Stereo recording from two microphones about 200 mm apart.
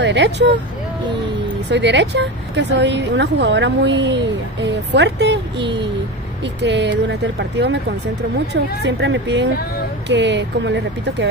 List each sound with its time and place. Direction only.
0.0 s speech: 60° right (ahead or behind)
1.7 s speech: 60° right (ahead or behind)
8.8 s speech: 60° right (ahead or behind)